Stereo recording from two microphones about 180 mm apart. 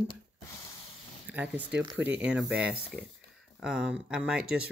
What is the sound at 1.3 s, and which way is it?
Speech, 10° right (ahead or behind).